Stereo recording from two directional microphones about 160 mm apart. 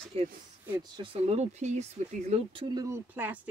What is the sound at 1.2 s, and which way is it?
Speech, 45° right (ahead or behind).